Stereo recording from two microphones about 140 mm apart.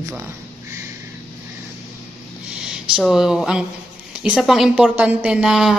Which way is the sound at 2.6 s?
5° right (ahead or behind).